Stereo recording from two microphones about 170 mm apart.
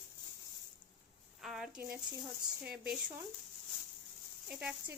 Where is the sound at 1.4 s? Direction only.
Centre (ahead or behind).